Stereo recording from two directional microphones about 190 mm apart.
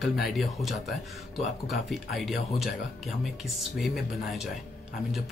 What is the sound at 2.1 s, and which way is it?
Speech, centre (ahead or behind).